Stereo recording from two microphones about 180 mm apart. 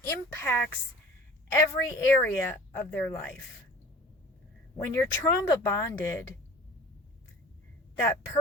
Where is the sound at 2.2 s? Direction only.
10° left (ahead or behind).